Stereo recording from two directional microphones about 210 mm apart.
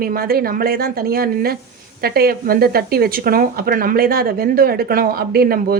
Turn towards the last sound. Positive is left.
turn(degrees=-45)  # may be behind; listen again after turning